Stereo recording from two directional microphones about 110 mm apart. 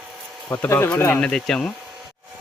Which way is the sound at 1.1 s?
5° left (ahead or behind).